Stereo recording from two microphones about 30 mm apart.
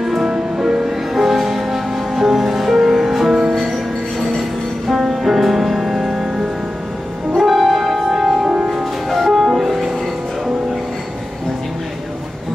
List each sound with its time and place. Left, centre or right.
0.0 s music: centre
2.8 s music: centre
3.1 s music: centre
4.9 s music: centre
7.3 s music: centre